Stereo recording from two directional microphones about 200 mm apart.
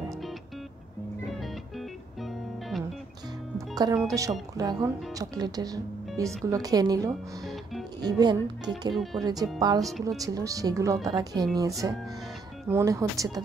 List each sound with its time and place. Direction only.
1.4 s music: centre (ahead or behind)
3.5 s speech: 15° right (ahead or behind)
8.1 s speech: 20° right (ahead or behind)
8.9 s speech: centre (ahead or behind)
9.2 s speech: 20° right (ahead or behind)